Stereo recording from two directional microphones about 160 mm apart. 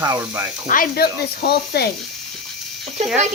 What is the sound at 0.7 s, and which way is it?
A woman's voice, 65° left (ahead or behind).